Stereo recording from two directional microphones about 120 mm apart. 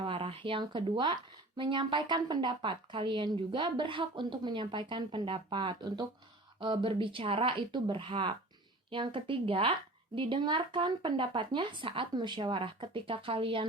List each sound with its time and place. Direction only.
0.0 s speech: 50° right (ahead or behind)